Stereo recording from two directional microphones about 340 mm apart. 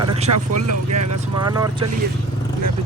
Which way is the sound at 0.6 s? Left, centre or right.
Right.